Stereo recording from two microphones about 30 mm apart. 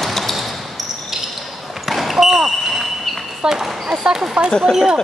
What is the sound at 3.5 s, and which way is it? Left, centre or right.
Speech, centre.